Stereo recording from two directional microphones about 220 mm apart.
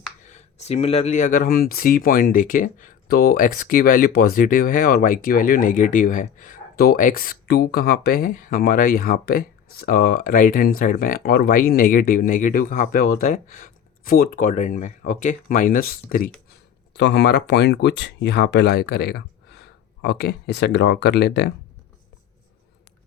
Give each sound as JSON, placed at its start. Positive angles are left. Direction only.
{"t": 0.3, "sound": "speech", "side_deg": 30}
{"t": 16.9, "sound": "speech", "side_deg": 50}